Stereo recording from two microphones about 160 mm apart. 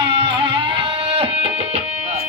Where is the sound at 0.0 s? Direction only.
30° right (ahead or behind).